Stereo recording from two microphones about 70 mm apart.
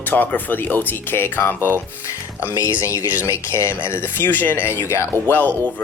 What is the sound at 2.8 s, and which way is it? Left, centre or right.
Speech, left.